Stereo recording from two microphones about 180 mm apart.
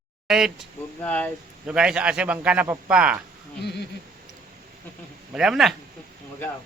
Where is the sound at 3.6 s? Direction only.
65° left (ahead or behind).